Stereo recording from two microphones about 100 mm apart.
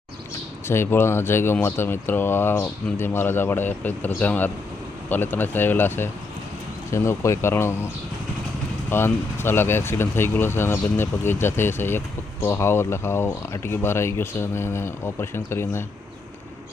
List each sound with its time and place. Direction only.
0.7 s speech: 25° left (ahead or behind)
8.9 s speech: 25° left (ahead or behind)